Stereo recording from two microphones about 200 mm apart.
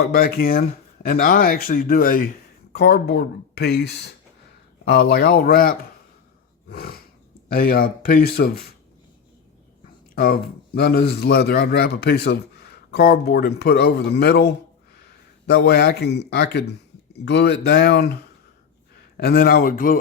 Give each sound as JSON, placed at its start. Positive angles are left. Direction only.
{"t": 0.1, "sound": "a man's voice", "side_deg": 50}
{"t": 10.2, "sound": "a man's voice", "side_deg": 50}
{"t": 19.1, "sound": "a man's voice", "side_deg": 50}